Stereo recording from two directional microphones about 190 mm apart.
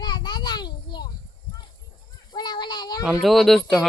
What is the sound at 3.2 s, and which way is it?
Speech, centre (ahead or behind).